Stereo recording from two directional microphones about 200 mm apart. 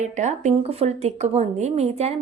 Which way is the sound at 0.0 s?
35° right (ahead or behind).